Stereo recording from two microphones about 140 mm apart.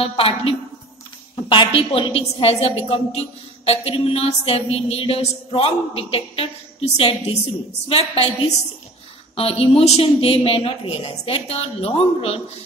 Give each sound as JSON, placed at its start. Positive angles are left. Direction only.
{"t": 0.0, "sound": "a woman's voice", "side_deg": 40}